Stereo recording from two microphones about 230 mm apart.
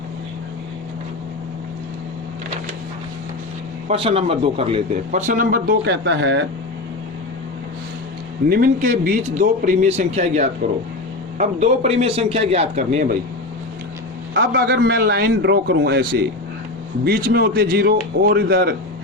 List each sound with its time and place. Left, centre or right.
3.8 s a man's voice: right
8.4 s a man's voice: right
14.3 s a man's voice: right